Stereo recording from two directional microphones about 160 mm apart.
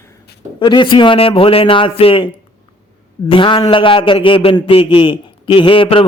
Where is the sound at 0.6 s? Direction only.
30° left (ahead or behind).